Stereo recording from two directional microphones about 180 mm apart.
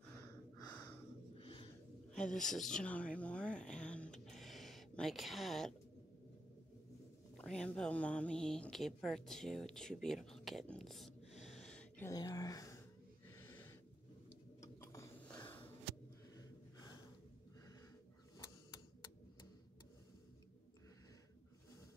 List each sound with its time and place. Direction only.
0.6 s snort: 20° left (ahead or behind)
1.4 s a sound: 30° left (ahead or behind)
2.1 s speech: 5° left (ahead or behind)
7.3 s a woman's voice: 5° left (ahead or behind)
12.1 s speech: 20° left (ahead or behind)
13.3 s wheeze: 10° left (ahead or behind)
14.6 s a sound: 15° left (ahead or behind)
16.3 s gasp: 20° left (ahead or behind)